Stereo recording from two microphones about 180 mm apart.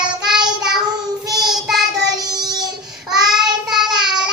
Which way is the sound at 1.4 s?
Centre (ahead or behind).